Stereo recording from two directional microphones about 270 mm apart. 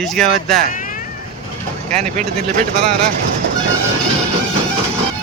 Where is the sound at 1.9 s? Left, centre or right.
Right.